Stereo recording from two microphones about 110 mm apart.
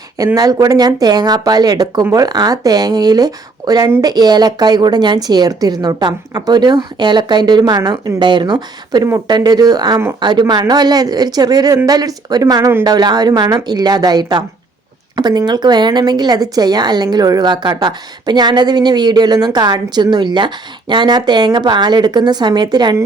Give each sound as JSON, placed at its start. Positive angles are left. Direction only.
{"t": 0.3, "sound": "speech", "side_deg": -35}